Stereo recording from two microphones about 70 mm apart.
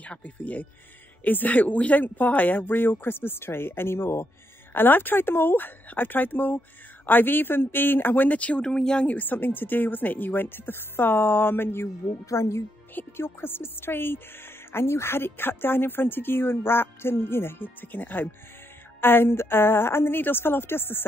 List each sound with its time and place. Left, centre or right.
0.0 s speech: left
9.0 s speech: left